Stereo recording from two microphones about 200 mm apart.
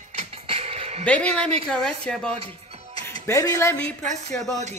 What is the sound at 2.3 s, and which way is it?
Music, 30° right (ahead or behind).